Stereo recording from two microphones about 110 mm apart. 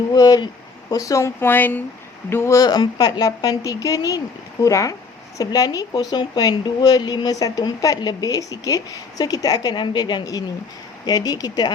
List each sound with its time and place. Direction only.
0.1 s a woman's voice: 35° left (ahead or behind)